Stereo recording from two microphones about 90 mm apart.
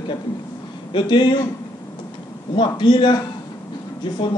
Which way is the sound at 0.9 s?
65° left (ahead or behind).